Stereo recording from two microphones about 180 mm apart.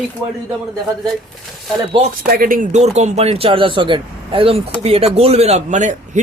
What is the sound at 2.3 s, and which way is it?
A man's voice, 50° right (ahead or behind).